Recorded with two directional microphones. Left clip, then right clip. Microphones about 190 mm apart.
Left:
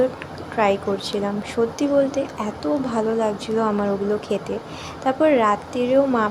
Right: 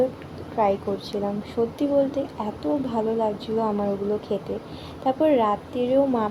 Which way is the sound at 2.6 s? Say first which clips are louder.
Left 3 dB; 35° left (ahead or behind).